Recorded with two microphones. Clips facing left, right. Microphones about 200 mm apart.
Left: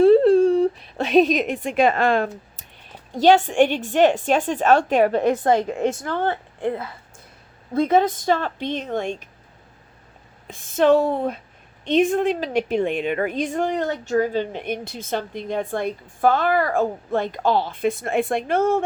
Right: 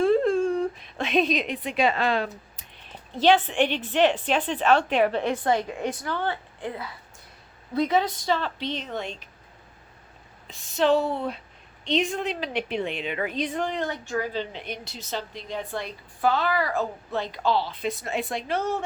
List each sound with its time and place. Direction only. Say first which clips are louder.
0.0 s a sound: left 8 dB; 35° left (ahead or behind); by 2.6 s 50° left (ahead or behind)
3.1 s a woman's voice: left 5 dB; 45° left (ahead or behind)
10.4 s a woman's voice: left 5 dB; 50° left (ahead or behind)